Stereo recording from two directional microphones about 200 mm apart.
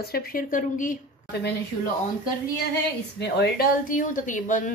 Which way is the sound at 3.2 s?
55° left (ahead or behind).